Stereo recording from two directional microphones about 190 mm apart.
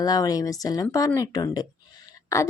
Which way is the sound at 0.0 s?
20° left (ahead or behind).